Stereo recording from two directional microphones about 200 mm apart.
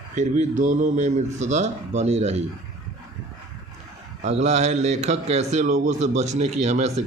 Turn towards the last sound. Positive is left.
turn(degrees=-35)  # may be behind; listen again after turning